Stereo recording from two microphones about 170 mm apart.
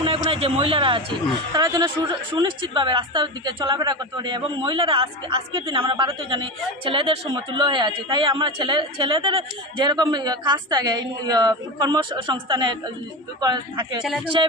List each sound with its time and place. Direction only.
0.0 s a man's voice: 30° right (ahead or behind)
1.5 s a woman's voice: 20° right (ahead or behind)